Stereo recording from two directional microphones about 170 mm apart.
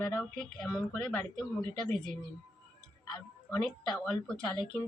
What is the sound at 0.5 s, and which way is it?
Speech, centre (ahead or behind).